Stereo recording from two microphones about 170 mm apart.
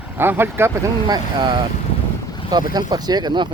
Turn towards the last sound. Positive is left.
turn(degrees=-25)  # may be behind; listen again after turning